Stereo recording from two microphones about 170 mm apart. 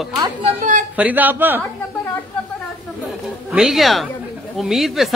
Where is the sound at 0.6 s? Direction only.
45° right (ahead or behind).